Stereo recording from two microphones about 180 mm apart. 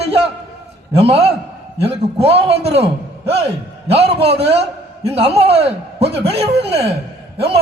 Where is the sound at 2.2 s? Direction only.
35° right (ahead or behind).